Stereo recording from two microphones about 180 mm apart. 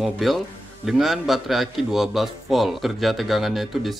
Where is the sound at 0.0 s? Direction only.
Centre (ahead or behind).